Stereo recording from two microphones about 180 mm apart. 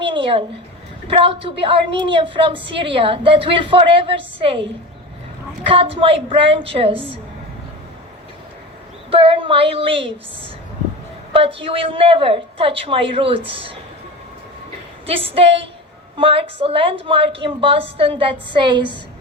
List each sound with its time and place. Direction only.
0.1 s a sound: 30° right (ahead or behind)
1.0 s a woman's voice: 30° right (ahead or behind)
5.6 s a woman's voice: 30° right (ahead or behind)
9.0 s a woman's voice: 30° right (ahead or behind)
11.3 s a woman's voice: 30° right (ahead or behind)
15.0 s a woman's voice: 30° right (ahead or behind)